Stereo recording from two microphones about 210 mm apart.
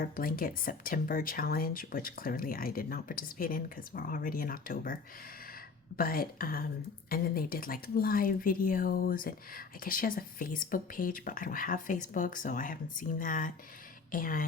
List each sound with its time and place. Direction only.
0.0 s speech: 45° left (ahead or behind)
6.0 s speech: 45° left (ahead or behind)